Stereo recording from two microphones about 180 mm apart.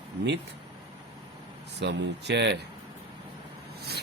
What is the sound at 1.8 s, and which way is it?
Speech, 80° right.